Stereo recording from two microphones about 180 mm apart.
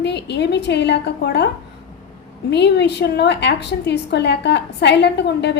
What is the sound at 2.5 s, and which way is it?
A woman's voice, 70° left (ahead or behind).